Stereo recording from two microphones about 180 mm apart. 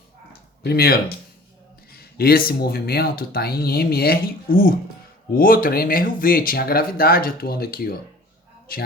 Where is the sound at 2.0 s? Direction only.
60° left (ahead or behind).